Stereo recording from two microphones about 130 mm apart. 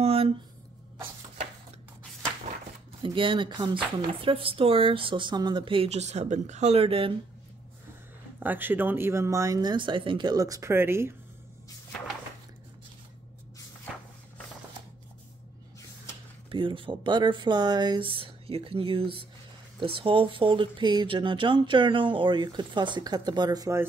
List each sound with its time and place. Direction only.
0.0 s a sound: 45° right (ahead or behind)
3.0 s speech: 40° right (ahead or behind)
5.9 s speech: 60° right (ahead or behind)
8.4 s speech: 15° right (ahead or behind)
16.4 s speech: 40° right (ahead or behind)